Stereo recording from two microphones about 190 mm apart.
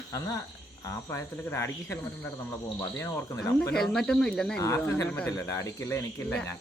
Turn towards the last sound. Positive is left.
turn(degrees=15)  # may be behind; listen again after turning